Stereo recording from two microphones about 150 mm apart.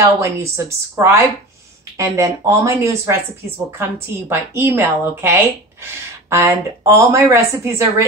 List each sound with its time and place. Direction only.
0.2 s a woman's voice: 20° right (ahead or behind)